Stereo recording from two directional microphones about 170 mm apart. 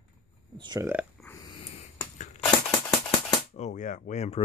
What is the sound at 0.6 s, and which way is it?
Speech, 25° right (ahead or behind).